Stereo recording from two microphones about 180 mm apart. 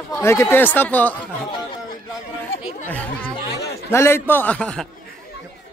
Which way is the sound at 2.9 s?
10° left (ahead or behind).